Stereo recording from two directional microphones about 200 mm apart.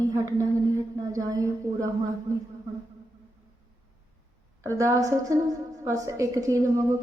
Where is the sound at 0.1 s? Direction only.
15° right (ahead or behind).